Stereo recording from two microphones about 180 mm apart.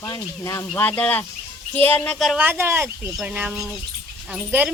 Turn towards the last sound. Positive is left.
turn(degrees=-10)  # may be behind; listen again after turning